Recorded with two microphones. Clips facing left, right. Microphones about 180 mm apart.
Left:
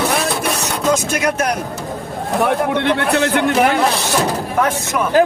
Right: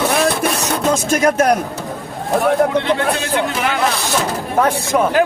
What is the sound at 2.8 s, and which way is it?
Speech, 65° left (ahead or behind).